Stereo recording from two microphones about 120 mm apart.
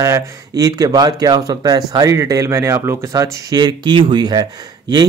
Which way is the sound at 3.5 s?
40° right (ahead or behind).